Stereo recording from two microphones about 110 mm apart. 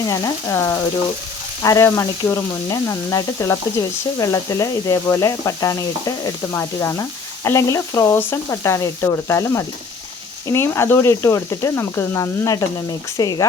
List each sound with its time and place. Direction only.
0.1 s speech: 30° left (ahead or behind)